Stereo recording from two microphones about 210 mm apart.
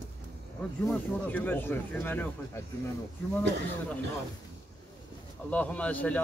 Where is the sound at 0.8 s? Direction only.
10° left (ahead or behind).